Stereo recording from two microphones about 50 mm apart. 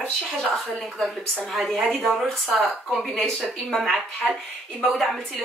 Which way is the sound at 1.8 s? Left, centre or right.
Centre.